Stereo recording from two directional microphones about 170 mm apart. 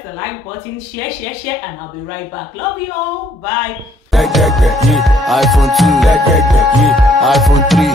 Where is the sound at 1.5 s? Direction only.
10° left (ahead or behind).